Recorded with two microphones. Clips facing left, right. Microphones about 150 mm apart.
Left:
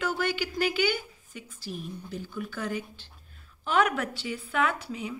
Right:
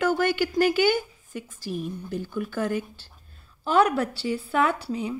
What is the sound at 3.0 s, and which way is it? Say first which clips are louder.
A woman's voice: right 1 dB; 35° right (ahead or behind).